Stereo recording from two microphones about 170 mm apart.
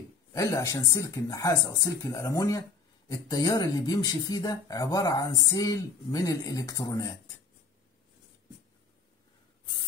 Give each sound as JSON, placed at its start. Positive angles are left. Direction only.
{"t": 0.3, "sound": "speech", "side_deg": 20}